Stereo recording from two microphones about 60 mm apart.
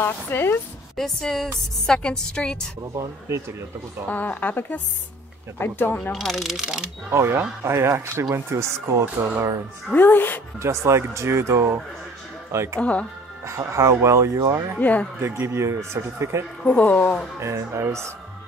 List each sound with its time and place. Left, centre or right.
0.0 s speech: left
0.9 s a woman's voice: centre
3.0 s speech: right
4.1 s speech: left
6.1 s a sound: centre
7.1 s speech: right
9.9 s speech: left
10.6 s speech: right
14.8 s speech: left
15.1 s speech: right
16.6 s speech: left
17.4 s speech: right